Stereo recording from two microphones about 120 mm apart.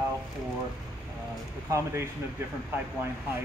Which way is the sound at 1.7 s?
25° right (ahead or behind).